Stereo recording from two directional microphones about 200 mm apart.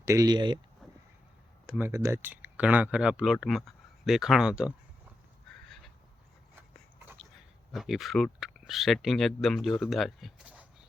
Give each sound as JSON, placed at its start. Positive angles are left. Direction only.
{"t": 0.0, "sound": "speech", "side_deg": -15}
{"t": 1.6, "sound": "a sound", "side_deg": -5}
{"t": 1.9, "sound": "speech", "side_deg": -15}
{"t": 7.7, "sound": "speech", "side_deg": 0}